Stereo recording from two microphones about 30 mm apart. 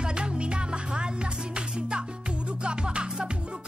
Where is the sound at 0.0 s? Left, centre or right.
Right.